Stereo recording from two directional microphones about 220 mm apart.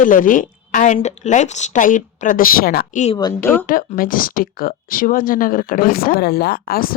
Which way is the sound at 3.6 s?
40° left (ahead or behind).